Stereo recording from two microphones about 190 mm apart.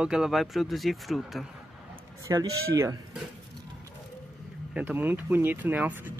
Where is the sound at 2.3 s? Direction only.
20° right (ahead or behind).